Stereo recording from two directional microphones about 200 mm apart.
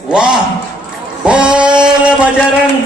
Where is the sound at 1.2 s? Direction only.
5° right (ahead or behind).